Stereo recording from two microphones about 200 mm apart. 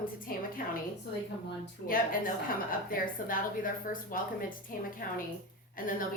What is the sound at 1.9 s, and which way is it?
A woman's voice, 45° left (ahead or behind).